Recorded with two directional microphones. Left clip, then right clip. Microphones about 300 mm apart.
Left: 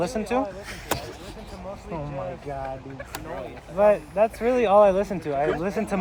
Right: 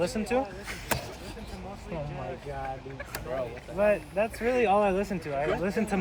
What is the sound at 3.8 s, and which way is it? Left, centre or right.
Speech, left.